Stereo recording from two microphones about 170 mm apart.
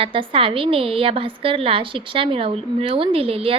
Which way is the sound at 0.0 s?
30° right (ahead or behind).